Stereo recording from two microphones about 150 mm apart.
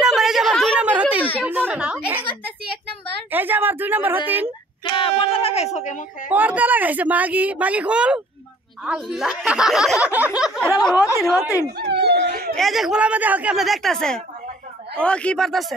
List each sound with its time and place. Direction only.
0.0 s a sound: 5° right (ahead or behind)
3.3 s speech: 15° right (ahead or behind)
4.8 s speech: 35° left (ahead or behind); by 6.0 s 50° left (ahead or behind)
6.3 s speech: 10° right (ahead or behind)
10.8 s speech: 25° left (ahead or behind)
11.2 s speech: 5° right (ahead or behind)
12.0 s speech: 90° right
12.5 s speech: centre (ahead or behind)